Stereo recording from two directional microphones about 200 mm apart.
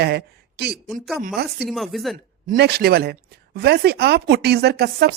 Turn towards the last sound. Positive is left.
turn(degrees=-50)  # may be behind; listen again after turning